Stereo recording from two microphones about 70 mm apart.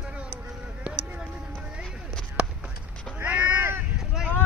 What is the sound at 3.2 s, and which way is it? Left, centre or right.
Crow, right.